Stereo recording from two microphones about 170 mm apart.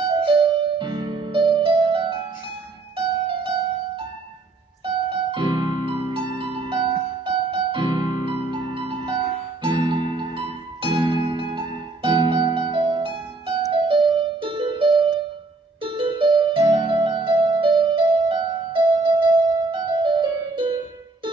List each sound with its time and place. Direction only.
0.2 s music: 30° right (ahead or behind)
4.8 s keyboard: 30° right (ahead or behind)
9.6 s music: 30° right (ahead or behind)
15.8 s piano: 30° right (ahead or behind)